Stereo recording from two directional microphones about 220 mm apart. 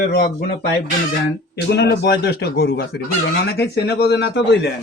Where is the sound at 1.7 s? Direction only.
50° left (ahead or behind).